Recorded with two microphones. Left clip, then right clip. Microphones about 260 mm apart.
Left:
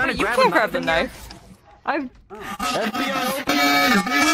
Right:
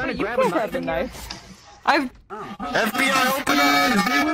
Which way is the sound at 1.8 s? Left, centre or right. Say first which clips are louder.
Right 5 dB; right.